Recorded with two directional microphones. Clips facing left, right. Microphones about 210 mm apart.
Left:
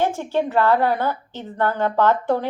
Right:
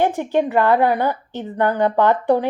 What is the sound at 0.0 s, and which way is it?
A woman's voice, 15° right (ahead or behind).